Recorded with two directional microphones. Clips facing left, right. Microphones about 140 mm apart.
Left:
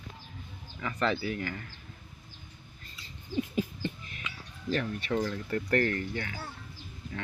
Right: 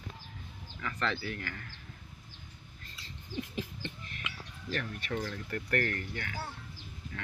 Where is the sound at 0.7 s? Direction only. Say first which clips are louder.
Left 5 dB; 15° left (ahead or behind).